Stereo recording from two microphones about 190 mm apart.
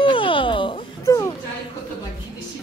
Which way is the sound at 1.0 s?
15° left (ahead or behind).